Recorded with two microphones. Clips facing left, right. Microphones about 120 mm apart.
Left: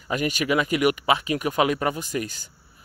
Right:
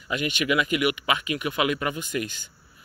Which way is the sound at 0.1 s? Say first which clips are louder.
Left 2 dB; 40° left (ahead or behind).